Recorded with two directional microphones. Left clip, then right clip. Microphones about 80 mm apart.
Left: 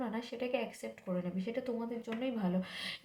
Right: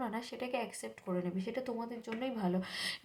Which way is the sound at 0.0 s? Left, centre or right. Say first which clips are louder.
Left 1 dB; right.